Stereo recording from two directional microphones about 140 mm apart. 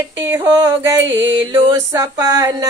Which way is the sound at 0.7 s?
15° right (ahead or behind).